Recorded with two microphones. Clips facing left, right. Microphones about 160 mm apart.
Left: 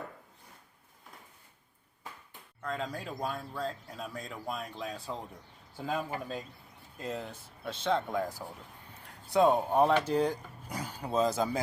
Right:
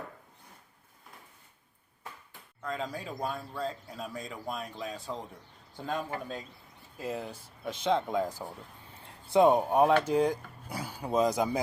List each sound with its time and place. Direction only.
2.6 s speech: centre (ahead or behind)
7.0 s speech: 10° right (ahead or behind)